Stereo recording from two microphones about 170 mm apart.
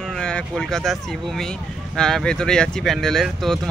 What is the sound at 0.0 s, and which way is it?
Speech, 5° left (ahead or behind).